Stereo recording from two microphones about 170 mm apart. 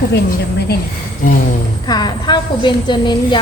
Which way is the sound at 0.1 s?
70° left (ahead or behind).